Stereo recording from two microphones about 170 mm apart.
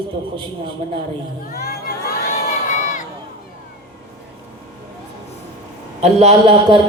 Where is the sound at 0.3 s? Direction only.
30° right (ahead or behind).